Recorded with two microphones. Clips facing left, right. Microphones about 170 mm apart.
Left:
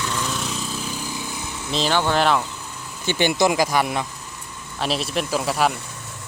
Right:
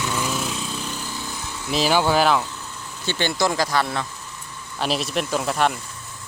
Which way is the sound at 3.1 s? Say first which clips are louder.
Left 3 dB; 15° left (ahead or behind).